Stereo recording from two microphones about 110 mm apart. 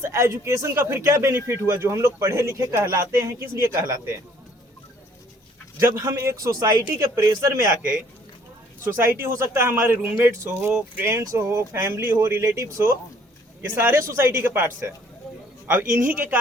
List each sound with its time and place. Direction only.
0.0 s a man's voice: 25° right (ahead or behind)
5.8 s a man's voice: 25° right (ahead or behind)
8.8 s a man's voice: 20° right (ahead or behind)
10.7 s speech: 10° right (ahead or behind)
11.0 s a man's voice: 25° right (ahead or behind)